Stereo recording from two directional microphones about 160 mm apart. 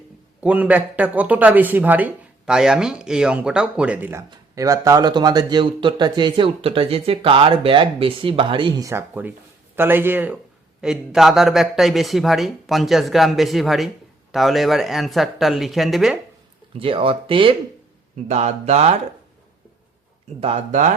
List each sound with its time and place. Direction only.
0.4 s speech: 10° right (ahead or behind)
4.3 s a man's voice: 20° right (ahead or behind); by 16.1 s centre (ahead or behind)
16.7 s speech: 35° right (ahead or behind)
18.3 s speech: 45° right (ahead or behind)
20.4 s speech: 45° right (ahead or behind)